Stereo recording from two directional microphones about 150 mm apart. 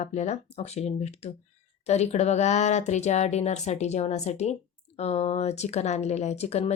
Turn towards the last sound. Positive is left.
turn(degrees=45)  # may be behind; listen again after turning